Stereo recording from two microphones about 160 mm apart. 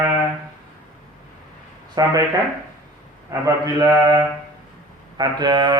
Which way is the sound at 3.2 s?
20° right (ahead or behind).